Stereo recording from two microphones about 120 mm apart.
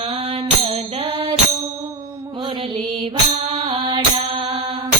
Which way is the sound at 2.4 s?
45° right (ahead or behind).